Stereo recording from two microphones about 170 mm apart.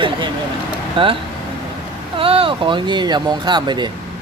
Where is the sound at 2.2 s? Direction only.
30° right (ahead or behind).